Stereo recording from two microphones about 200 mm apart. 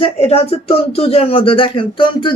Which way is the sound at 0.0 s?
30° left (ahead or behind).